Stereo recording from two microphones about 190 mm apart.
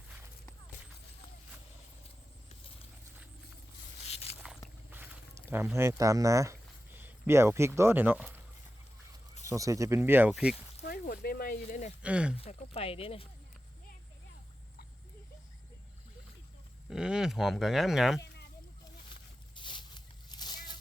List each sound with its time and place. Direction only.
4.0 s biting: 35° left (ahead or behind)
4.9 s speech: 10° right (ahead or behind)
9.5 s speech: 15° right (ahead or behind)
10.8 s a sound: 50° left (ahead or behind)
12.0 s speech: 5° right (ahead or behind)
12.4 s speech: 30° left (ahead or behind)
16.9 s speech: 5° right (ahead or behind)
19.5 s a sound: 25° left (ahead or behind)